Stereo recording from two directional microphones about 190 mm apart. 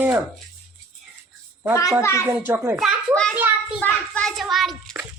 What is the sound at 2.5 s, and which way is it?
Speech, 10° right (ahead or behind).